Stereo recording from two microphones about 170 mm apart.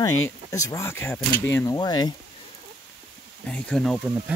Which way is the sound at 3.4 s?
5° left (ahead or behind).